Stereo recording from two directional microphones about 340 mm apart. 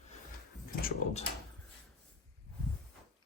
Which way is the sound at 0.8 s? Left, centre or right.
Left.